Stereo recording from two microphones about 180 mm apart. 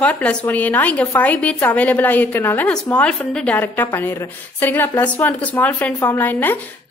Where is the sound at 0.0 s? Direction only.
5° left (ahead or behind).